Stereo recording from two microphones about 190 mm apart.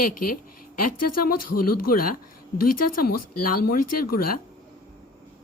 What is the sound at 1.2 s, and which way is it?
Speech, 50° left (ahead or behind).